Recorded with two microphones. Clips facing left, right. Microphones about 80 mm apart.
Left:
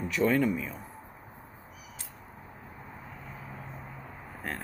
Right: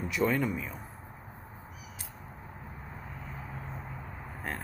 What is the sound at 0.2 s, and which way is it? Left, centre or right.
Speech, centre.